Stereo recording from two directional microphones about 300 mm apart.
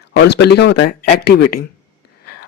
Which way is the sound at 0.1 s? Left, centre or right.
Left.